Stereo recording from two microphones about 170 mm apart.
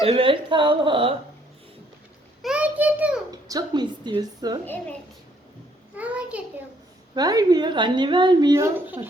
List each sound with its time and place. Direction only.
0.0 s a woman's voice: 35° right (ahead or behind)
2.4 s child singing: 5° right (ahead or behind)
3.5 s a woman's voice: 25° right (ahead or behind)
4.6 s a woman's voice: 10° left (ahead or behind)
6.0 s a sound: 10° right (ahead or behind)
7.2 s a woman's voice: 25° right (ahead or behind)